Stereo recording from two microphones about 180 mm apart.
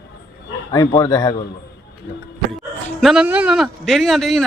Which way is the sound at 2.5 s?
Centre (ahead or behind).